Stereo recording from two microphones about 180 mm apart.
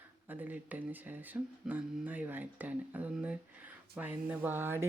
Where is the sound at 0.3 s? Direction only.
10° right (ahead or behind).